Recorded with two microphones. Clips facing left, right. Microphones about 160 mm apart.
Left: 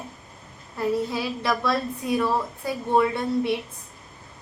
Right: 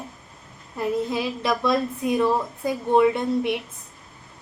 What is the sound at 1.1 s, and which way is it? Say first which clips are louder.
A woman's voice: right 1 dB; 20° right (ahead or behind).